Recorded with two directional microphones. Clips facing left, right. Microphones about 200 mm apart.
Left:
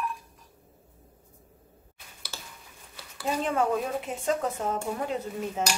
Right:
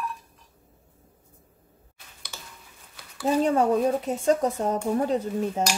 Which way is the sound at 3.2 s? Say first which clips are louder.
Right 5 dB; 35° right (ahead or behind).